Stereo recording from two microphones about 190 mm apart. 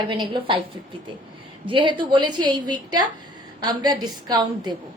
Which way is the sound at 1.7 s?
25° right (ahead or behind).